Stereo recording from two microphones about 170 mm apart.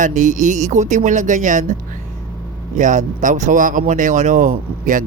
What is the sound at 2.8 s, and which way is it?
Speech, 50° right (ahead or behind).